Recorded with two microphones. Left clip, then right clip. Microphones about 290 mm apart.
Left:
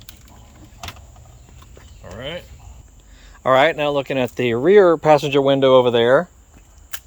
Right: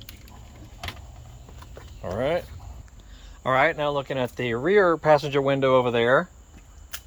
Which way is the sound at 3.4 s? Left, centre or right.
Left.